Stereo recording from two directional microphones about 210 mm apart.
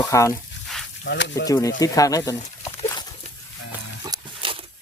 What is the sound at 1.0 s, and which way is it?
Speech, 55° left (ahead or behind).